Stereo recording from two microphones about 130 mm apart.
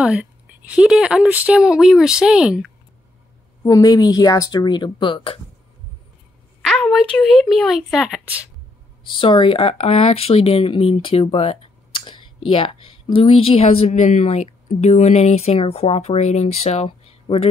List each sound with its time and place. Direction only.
0.0 s a woman's voice: 10° right (ahead or behind)
3.6 s a woman's voice: 30° left (ahead or behind)
6.6 s speech: centre (ahead or behind)
9.2 s speech: 40° left (ahead or behind)
13.9 s speech: 70° left (ahead or behind); by 17.5 s 50° left (ahead or behind)